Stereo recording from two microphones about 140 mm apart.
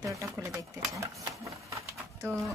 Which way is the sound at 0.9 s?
20° right (ahead or behind).